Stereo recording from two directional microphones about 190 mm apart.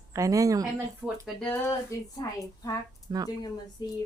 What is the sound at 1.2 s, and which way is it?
Speech, 5° left (ahead or behind).